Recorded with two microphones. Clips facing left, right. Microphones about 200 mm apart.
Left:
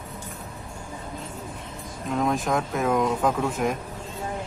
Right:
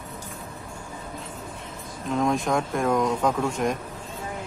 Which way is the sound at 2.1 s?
Centre (ahead or behind).